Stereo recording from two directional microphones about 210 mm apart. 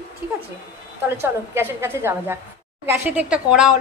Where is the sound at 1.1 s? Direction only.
10° right (ahead or behind).